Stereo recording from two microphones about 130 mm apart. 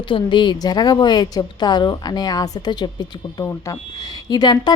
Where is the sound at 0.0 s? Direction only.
40° left (ahead or behind).